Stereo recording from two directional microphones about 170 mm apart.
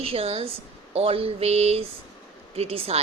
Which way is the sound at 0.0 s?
35° right (ahead or behind).